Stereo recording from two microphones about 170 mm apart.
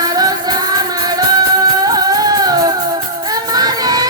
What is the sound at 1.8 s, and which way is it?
Music, 20° right (ahead or behind).